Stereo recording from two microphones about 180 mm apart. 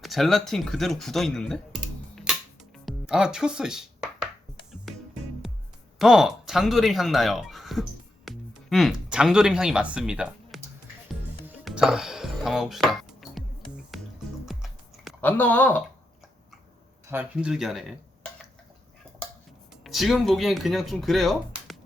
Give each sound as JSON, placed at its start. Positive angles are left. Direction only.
{"t": 0.0, "sound": "speech", "side_deg": 0}
{"t": 6.0, "sound": "speech", "side_deg": -5}
{"t": 11.6, "sound": "dishes", "side_deg": -5}
{"t": 13.9, "sound": "music", "side_deg": 0}
{"t": 15.2, "sound": "speech", "side_deg": 10}
{"t": 17.1, "sound": "speech", "side_deg": -10}
{"t": 19.7, "sound": "speech", "side_deg": 0}